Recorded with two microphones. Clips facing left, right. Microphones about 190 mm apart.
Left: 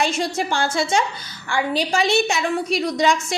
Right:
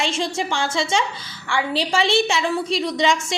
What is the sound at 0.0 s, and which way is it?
A woman's voice, 25° right (ahead or behind).